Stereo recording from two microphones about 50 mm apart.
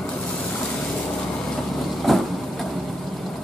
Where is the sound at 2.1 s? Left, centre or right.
Centre.